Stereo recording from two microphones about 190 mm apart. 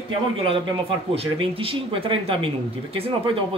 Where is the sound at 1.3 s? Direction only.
30° right (ahead or behind).